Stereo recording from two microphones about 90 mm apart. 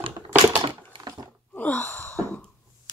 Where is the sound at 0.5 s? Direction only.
70° right (ahead or behind).